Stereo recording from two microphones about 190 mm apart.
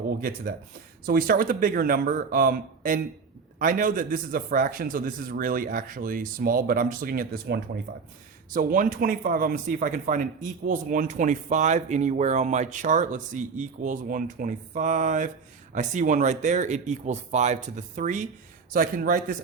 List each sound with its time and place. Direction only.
0.2 s a man's voice: 50° right (ahead or behind)
8.5 s a man's voice: 45° right (ahead or behind)